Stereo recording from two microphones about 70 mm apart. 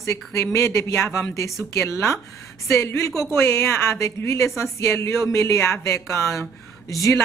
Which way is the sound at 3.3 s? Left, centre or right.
Left.